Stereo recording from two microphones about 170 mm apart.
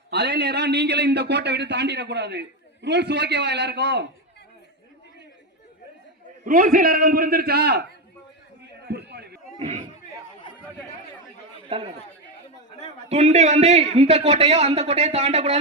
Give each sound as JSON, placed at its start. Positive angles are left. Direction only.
{"t": 0.1, "sound": "a man's voice", "side_deg": -80}
{"t": 6.4, "sound": "a man's voice", "side_deg": -55}
{"t": 8.9, "sound": "run", "side_deg": -75}
{"t": 9.6, "sound": "speech", "side_deg": -40}
{"t": 13.1, "sound": "a man's voice", "side_deg": -40}